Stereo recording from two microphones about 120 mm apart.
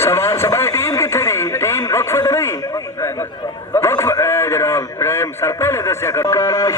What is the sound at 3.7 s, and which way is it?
A man's voice, 25° left (ahead or behind).